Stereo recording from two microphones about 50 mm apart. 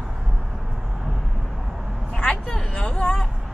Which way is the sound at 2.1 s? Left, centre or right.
Centre.